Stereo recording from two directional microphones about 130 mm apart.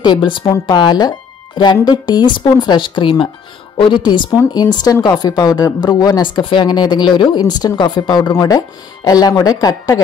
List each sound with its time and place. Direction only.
0.0 s speech: 35° left (ahead or behind)